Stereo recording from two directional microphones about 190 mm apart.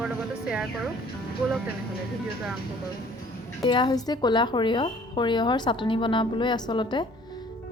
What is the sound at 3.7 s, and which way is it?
A woman's voice, 25° left (ahead or behind).